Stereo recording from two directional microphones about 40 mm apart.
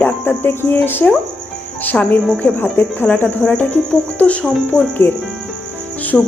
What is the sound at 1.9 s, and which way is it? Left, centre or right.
Speech, centre.